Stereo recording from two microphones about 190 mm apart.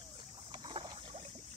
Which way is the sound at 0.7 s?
25° right (ahead or behind).